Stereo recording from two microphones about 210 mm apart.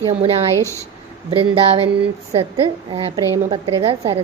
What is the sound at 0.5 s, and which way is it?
Speech, 15° left (ahead or behind).